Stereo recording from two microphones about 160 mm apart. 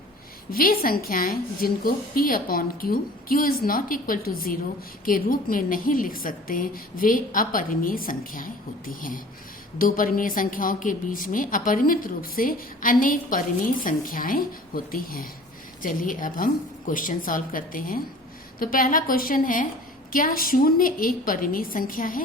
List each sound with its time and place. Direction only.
0.5 s a woman's voice: 65° left (ahead or behind)